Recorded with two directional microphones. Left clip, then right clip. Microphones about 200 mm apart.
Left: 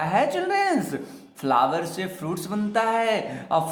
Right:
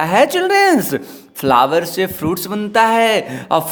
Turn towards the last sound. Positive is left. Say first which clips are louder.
# right 7 dB
turn(degrees=-50)  # may be behind; listen again after turning